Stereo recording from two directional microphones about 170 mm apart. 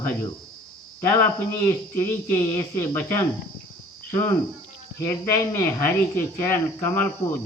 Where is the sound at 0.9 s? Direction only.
15° left (ahead or behind).